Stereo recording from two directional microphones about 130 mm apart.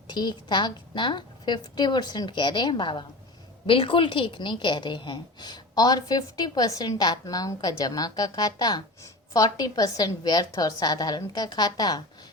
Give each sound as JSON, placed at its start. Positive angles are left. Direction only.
{"t": 0.1, "sound": "a woman's voice", "side_deg": 35}